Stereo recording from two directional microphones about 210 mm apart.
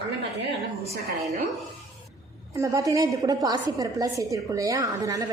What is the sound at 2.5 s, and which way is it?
A woman's voice, 15° right (ahead or behind).